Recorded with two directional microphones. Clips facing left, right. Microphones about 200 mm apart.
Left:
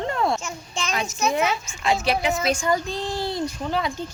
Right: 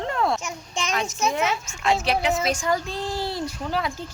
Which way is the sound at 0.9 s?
Centre (ahead or behind).